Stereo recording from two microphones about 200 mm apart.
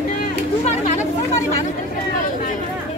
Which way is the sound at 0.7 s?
35° left (ahead or behind).